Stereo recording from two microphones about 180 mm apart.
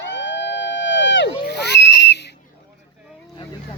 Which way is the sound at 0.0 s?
80° left.